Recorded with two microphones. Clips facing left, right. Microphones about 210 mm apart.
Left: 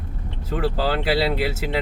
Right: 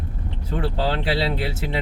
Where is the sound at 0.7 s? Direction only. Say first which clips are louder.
Left 1 dB; centre (ahead or behind).